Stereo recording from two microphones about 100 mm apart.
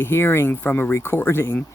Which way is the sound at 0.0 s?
25° left (ahead or behind).